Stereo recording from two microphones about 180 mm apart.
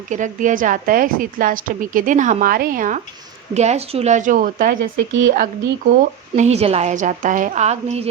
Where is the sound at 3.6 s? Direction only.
35° right (ahead or behind).